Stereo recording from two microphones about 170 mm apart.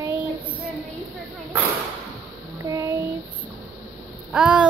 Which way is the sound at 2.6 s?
20° right (ahead or behind).